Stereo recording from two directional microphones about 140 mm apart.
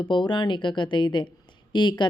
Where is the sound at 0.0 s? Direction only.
35° left (ahead or behind).